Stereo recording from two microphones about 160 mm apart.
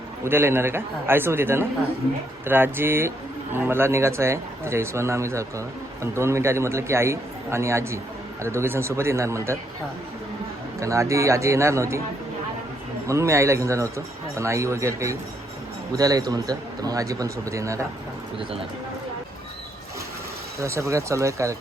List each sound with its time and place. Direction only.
0.3 s speech: 15° right (ahead or behind)
10.8 s a man's voice: 20° right (ahead or behind)
13.1 s a man's voice: 20° right (ahead or behind)
20.6 s a man's voice: 20° right (ahead or behind)